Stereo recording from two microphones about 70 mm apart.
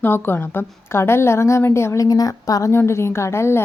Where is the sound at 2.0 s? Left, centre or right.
Left.